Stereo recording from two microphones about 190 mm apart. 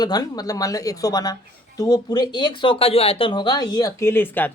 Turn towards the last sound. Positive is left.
turn(degrees=10)  # may be behind; listen again after turning